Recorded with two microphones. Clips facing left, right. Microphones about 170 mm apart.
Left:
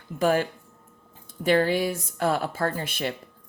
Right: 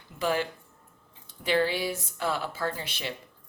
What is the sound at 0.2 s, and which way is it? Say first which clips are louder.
Speech: left 5 dB; 50° left (ahead or behind).